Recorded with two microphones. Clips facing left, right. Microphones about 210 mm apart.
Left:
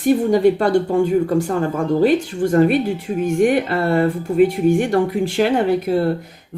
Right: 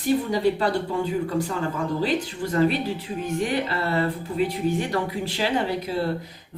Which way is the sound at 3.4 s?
50° left (ahead or behind).